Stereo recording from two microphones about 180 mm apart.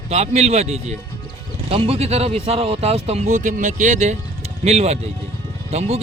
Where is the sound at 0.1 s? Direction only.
35° right (ahead or behind).